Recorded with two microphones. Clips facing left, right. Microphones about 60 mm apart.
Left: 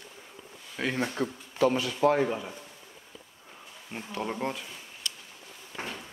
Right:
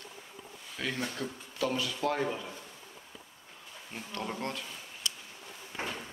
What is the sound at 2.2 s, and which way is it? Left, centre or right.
Speech, centre.